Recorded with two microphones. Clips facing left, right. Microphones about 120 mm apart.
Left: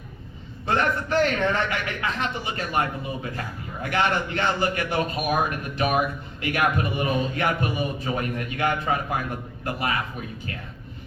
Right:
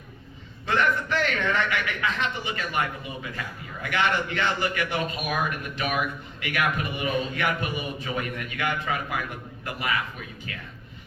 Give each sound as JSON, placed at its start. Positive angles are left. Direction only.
{"t": 0.7, "sound": "a man's voice", "side_deg": 40}